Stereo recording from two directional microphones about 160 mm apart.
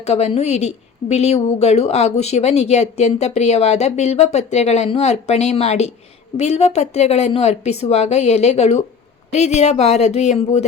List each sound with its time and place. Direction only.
0.0 s speech: 40° left (ahead or behind)